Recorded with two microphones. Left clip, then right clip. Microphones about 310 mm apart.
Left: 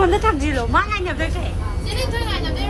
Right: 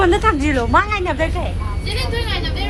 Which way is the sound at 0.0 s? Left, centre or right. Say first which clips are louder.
Right 2 dB; right.